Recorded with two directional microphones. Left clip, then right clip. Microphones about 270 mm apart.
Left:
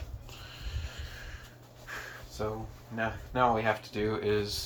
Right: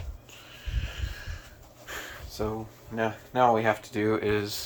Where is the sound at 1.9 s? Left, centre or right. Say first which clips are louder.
Right 3 dB; right.